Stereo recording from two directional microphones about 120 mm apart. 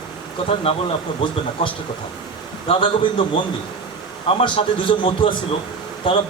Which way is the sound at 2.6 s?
45° left (ahead or behind).